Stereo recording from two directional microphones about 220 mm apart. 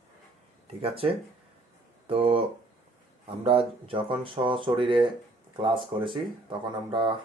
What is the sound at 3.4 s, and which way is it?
A man's voice, 25° right (ahead or behind).